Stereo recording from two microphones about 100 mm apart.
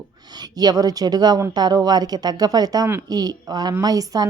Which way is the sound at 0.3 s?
40° right (ahead or behind).